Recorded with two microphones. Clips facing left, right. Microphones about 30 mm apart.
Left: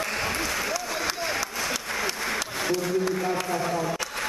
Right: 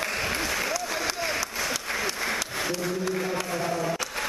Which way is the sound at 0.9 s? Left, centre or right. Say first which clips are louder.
Even; centre.